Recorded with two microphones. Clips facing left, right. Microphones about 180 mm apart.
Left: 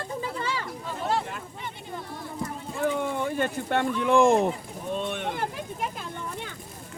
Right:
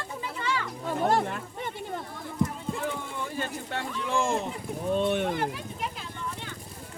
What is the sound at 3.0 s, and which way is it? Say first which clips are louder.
Speech: left 7 dB; 60° left (ahead or behind).